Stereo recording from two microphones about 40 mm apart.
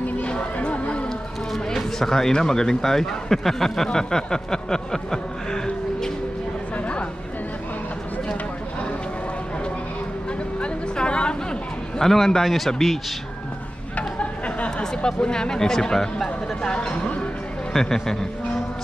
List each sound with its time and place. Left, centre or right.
0.2 s a sound: left
1.5 s a man's voice: centre
10.6 s a sound: left
12.0 s a man's voice: centre
14.8 s speech: left
17.7 s a man's voice: centre